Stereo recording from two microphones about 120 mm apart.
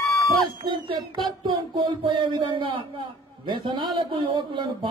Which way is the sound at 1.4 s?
40° right (ahead or behind).